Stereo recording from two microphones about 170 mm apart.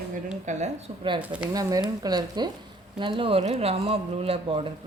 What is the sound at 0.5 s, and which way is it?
Speech, 45° right (ahead or behind).